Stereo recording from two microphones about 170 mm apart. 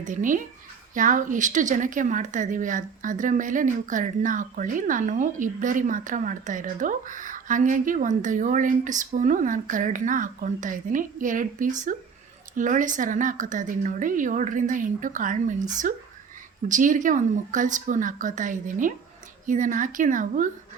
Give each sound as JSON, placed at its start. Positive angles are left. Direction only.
{"t": 0.0, "sound": "a woman's voice", "side_deg": -50}